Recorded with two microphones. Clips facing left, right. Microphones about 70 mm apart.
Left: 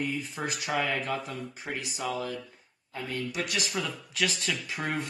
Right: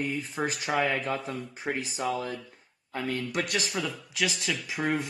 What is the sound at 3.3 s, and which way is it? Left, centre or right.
Speech, right.